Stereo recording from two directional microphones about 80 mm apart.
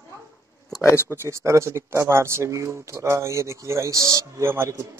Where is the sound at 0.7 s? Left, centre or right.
Left.